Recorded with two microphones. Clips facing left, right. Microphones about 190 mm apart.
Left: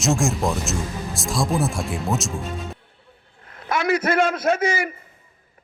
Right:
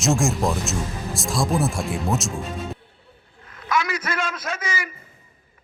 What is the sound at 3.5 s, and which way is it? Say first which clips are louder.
A man's voice: left 3 dB; 60° left (ahead or behind).